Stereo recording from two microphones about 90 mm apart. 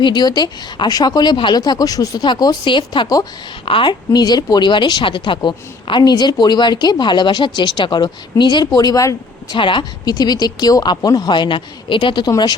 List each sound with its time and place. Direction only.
0.0 s speech: 55° left (ahead or behind)
2.2 s a woman's voice: 55° left (ahead or behind)
3.7 s a woman's voice: 75° left (ahead or behind)
4.1 s a woman's voice: 45° left (ahead or behind); by 5.4 s 65° left (ahead or behind)
5.4 s a woman's voice: 55° left (ahead or behind)
8.7 s speech: 45° left (ahead or behind)
9.5 s a woman's voice: 65° left (ahead or behind)
10.1 s speech: 45° left (ahead or behind)